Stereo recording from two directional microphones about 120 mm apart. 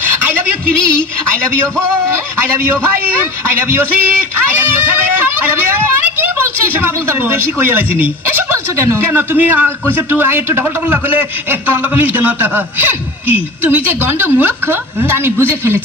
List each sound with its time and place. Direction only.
9.1 s a man's voice: 15° right (ahead or behind)
11.9 s a man's voice: 15° right (ahead or behind)
13.7 s a woman's voice: 20° right (ahead or behind)